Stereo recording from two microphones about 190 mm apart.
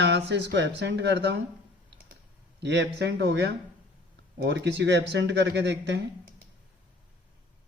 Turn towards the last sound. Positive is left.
turn(degrees=-65)  # may be behind; listen again after turning